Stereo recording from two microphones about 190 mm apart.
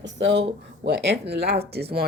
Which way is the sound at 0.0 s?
70° right (ahead or behind).